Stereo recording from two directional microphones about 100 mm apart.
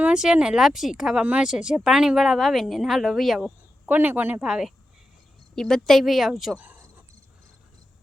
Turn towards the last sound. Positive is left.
turn(degrees=-15)  # may be behind; listen again after turning